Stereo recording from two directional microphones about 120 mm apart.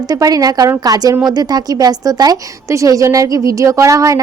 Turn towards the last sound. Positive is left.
turn(degrees=-25)  # may be behind; listen again after turning